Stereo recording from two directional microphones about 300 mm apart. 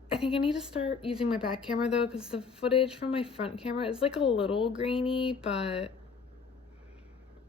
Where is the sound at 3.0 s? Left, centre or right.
Centre.